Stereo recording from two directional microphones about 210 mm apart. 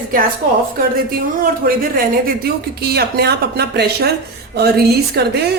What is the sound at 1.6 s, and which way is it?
Speech, 45° right (ahead or behind).